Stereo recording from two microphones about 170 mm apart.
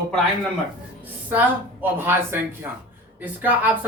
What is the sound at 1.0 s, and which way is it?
A woman's voice, 10° right (ahead or behind).